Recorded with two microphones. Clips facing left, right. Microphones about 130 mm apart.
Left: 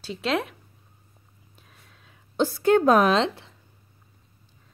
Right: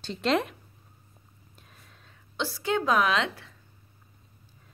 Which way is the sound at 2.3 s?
50° left (ahead or behind).